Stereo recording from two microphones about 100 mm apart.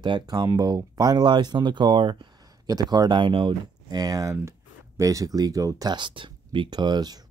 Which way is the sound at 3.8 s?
40° right (ahead or behind).